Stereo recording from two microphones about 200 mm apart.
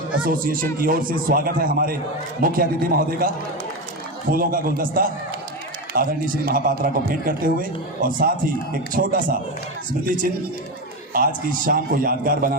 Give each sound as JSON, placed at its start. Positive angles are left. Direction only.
{"t": 0.3, "sound": "a man's voice", "side_deg": -45}
{"t": 11.4, "sound": "a man's voice", "side_deg": -45}